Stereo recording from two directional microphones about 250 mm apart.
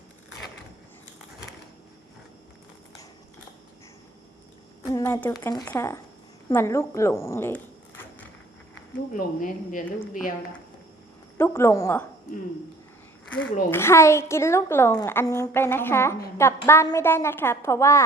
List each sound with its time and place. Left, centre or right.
4.9 s speech: centre
8.7 s speech: left
11.3 s a woman's voice: centre
13.7 s a woman's voice: centre